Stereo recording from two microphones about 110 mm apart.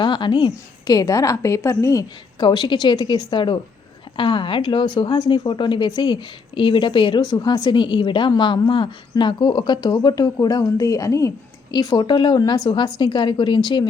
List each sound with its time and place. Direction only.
0.0 s a woman's voice: 45° left (ahead or behind); by 2.0 s 30° left (ahead or behind)
2.4 s a woman's voice: 45° left (ahead or behind)